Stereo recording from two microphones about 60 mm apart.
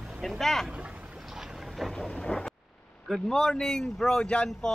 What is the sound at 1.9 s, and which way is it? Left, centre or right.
Vehicle, centre.